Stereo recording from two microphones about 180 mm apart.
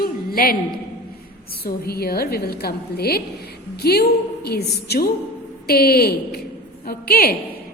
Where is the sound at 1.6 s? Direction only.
60° left (ahead or behind).